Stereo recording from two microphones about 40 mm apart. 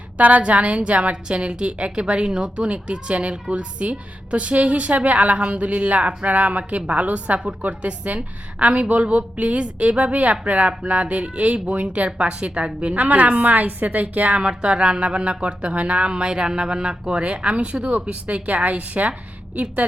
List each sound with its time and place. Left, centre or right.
0.2 s a woman's voice: right
14.4 s a woman's voice: right